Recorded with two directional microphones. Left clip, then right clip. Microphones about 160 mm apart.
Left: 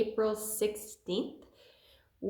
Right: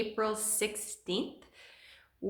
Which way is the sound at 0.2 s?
10° right (ahead or behind).